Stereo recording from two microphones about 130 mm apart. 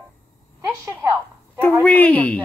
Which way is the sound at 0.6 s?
20° right (ahead or behind).